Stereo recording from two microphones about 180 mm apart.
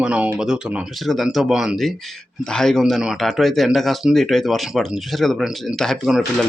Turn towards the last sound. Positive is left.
turn(degrees=0)  # may be behind; listen again after turning